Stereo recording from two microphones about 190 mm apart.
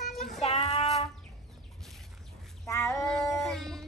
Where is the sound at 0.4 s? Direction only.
35° left (ahead or behind).